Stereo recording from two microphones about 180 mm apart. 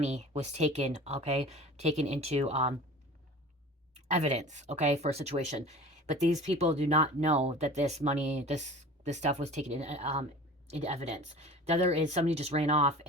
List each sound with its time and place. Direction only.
0.0 s speech: 35° right (ahead or behind)
4.1 s speech: 40° right (ahead or behind)